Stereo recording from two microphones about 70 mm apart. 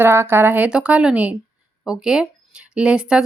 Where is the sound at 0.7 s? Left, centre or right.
Centre.